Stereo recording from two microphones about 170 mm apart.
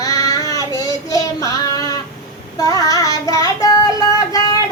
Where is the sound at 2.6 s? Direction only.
20° left (ahead or behind).